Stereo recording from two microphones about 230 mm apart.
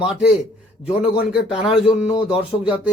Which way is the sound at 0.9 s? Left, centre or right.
Centre.